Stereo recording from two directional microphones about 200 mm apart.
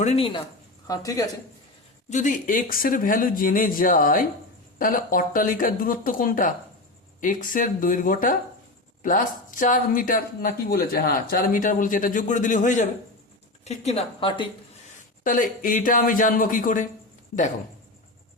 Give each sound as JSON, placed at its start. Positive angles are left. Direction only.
{"t": 0.0, "sound": "a woman's voice", "side_deg": 30}
{"t": 2.0, "sound": "a woman's voice", "side_deg": 40}
{"t": 15.2, "sound": "speech", "side_deg": 40}